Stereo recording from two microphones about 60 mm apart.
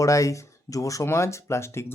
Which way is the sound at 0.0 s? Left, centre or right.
Left.